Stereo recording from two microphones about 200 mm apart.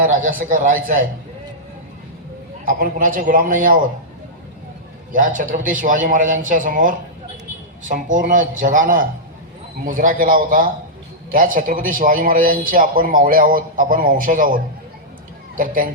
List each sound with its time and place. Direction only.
0.0 s a man's voice: 40° right (ahead or behind)
2.6 s a man's voice: 45° right (ahead or behind)
5.1 s a man's voice: 40° right (ahead or behind)